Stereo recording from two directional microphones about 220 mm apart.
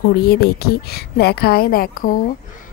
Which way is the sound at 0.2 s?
45° left (ahead or behind).